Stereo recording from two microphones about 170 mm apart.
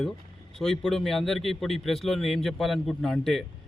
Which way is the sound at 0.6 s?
Centre (ahead or behind).